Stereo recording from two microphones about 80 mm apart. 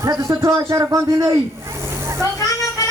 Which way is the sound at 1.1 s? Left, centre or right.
Right.